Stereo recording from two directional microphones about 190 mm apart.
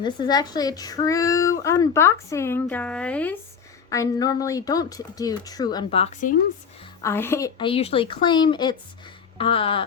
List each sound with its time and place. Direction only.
0.0 s speech: 20° left (ahead or behind); by 3.3 s 5° left (ahead or behind)
3.8 s a woman's voice: 20° left (ahead or behind); by 6.3 s 40° left (ahead or behind)
7.0 s speech: 15° left (ahead or behind)
7.7 s a woman's voice: 30° left (ahead or behind)